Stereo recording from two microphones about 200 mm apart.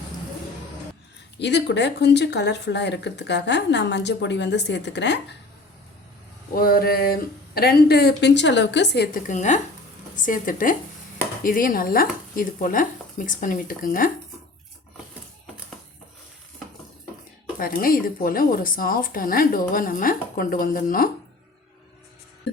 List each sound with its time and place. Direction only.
1.4 s speech: 60° left (ahead or behind)
6.5 s speech: 45° left (ahead or behind)
9.2 s speech: 35° left (ahead or behind)
17.6 s speech: 45° left (ahead or behind)